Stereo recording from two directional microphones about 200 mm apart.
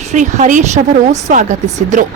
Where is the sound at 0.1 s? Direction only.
35° right (ahead or behind).